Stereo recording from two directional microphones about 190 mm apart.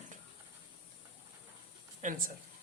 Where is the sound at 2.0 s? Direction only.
40° right (ahead or behind).